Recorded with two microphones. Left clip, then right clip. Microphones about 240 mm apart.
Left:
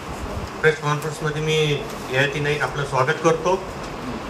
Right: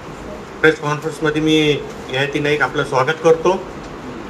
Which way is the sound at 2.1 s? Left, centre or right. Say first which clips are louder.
Right 3 dB; right.